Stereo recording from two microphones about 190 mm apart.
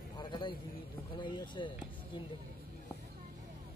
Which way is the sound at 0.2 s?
25° left (ahead or behind).